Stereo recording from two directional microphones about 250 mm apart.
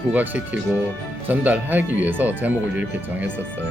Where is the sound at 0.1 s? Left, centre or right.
Centre.